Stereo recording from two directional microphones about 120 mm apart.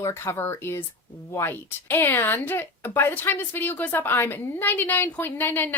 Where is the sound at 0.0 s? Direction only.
25° left (ahead or behind).